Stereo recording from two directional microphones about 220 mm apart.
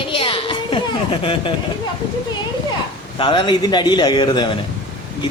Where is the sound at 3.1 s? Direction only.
20° left (ahead or behind).